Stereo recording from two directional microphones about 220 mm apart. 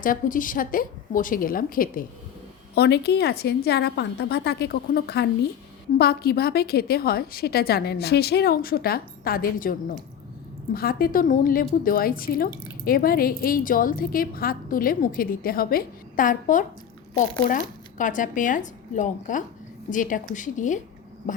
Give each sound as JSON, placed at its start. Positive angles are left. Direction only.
{"t": 0.0, "sound": "a woman's voice", "side_deg": 40}
{"t": 10.8, "sound": "a woman's voice", "side_deg": 40}